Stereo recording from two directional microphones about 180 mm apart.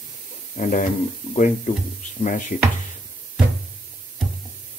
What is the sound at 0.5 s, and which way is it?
Speech, 45° left (ahead or behind).